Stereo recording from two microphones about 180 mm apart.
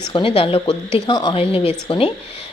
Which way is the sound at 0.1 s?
30° left (ahead or behind).